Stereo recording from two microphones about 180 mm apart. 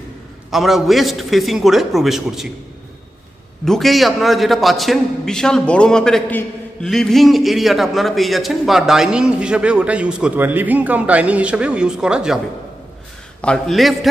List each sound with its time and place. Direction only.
0.5 s a man's voice: centre (ahead or behind)
3.6 s a man's voice: centre (ahead or behind)
13.4 s a man's voice: 5° left (ahead or behind)